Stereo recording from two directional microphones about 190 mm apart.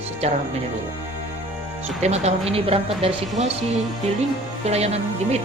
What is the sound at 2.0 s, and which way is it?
Speech, 35° right (ahead or behind).